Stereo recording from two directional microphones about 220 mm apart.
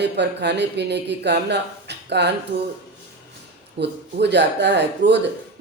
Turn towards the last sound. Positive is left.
turn(degrees=-50)  # may be behind; listen again after turning